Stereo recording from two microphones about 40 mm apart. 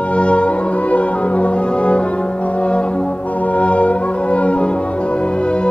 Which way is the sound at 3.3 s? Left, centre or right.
Left.